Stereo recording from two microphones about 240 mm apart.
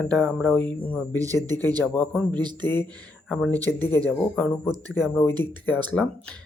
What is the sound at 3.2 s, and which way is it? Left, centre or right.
Speech, centre.